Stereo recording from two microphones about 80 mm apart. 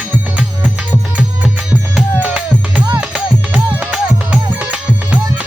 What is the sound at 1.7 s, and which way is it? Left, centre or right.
Music, centre.